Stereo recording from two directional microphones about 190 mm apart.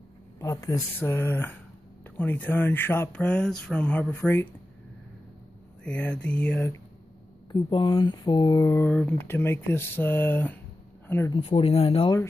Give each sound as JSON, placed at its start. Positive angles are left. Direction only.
{"t": 0.4, "sound": "speech", "side_deg": 20}
{"t": 5.9, "sound": "speech", "side_deg": 5}
{"t": 7.5, "sound": "speech", "side_deg": 25}
{"t": 11.3, "sound": "speech", "side_deg": 30}